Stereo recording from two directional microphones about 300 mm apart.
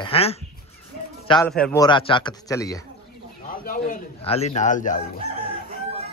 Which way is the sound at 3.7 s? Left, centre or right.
Left.